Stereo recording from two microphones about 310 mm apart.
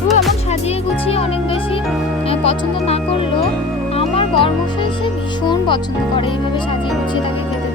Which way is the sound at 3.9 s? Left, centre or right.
Centre.